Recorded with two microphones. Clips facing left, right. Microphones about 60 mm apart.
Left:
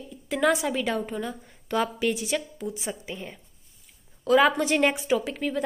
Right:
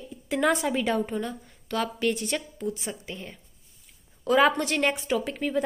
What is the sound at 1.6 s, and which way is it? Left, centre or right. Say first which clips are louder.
A woman's voice: left 1 dB; centre.